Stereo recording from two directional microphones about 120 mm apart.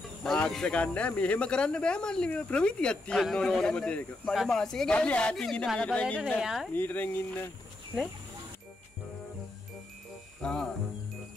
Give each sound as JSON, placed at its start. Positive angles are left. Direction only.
{"t": 0.2, "sound": "speech", "side_deg": 5}
{"t": 6.4, "sound": "speech", "side_deg": 0}
{"t": 6.7, "sound": "speech", "side_deg": 15}
{"t": 10.4, "sound": "speech", "side_deg": 5}